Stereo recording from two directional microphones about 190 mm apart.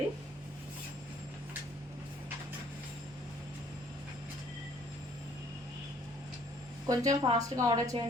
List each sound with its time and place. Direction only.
6.8 s a woman's voice: 20° right (ahead or behind)